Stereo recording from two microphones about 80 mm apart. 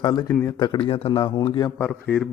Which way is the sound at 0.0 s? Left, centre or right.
Left.